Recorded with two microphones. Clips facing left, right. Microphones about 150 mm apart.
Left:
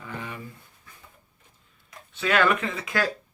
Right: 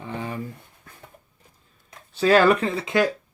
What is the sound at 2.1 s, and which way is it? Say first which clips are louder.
Speech: right 6 dB; 35° right (ahead or behind).